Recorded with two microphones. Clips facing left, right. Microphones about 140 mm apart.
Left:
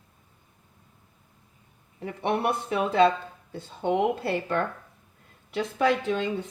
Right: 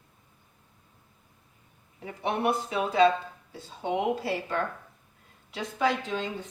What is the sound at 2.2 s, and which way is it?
Speech, 60° left (ahead or behind).